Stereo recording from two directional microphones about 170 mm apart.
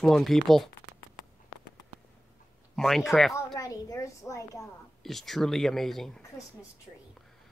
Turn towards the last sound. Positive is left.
turn(degrees=0)  # may be behind; listen again after turning